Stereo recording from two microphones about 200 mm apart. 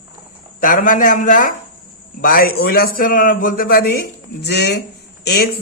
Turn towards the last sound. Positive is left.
turn(degrees=50)  # may be behind; listen again after turning